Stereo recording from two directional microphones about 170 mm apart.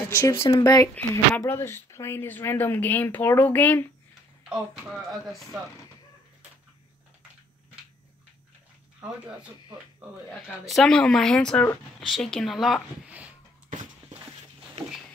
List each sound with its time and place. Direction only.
0.1 s speech: 15° left (ahead or behind)
0.9 s speech: 10° left (ahead or behind)
4.5 s speech: centre (ahead or behind)
10.7 s speech: 5° left (ahead or behind)